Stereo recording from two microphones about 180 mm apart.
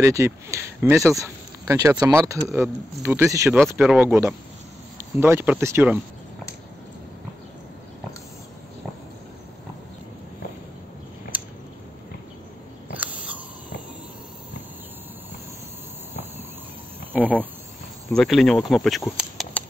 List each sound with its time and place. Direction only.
0.0 s speech: 15° right (ahead or behind)
3.5 s speech: centre (ahead or behind)
4.1 s speech: 15° right (ahead or behind)
12.9 s owl: 10° right (ahead or behind)
18.1 s speech: centre (ahead or behind)